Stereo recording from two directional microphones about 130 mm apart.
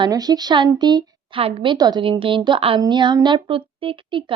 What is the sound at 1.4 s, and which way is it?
Speech, 45° right (ahead or behind).